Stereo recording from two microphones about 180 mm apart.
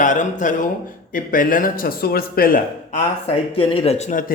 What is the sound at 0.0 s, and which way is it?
A man's voice, 45° left (ahead or behind).